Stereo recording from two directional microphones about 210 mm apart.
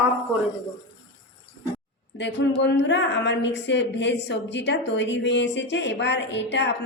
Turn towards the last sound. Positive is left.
turn(degrees=55)  # may be behind; listen again after turning